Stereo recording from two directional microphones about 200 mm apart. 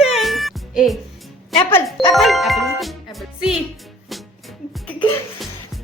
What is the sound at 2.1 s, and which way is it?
Speech, centre (ahead or behind).